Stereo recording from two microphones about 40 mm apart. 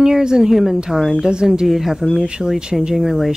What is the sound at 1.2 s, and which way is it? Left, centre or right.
Speech, centre.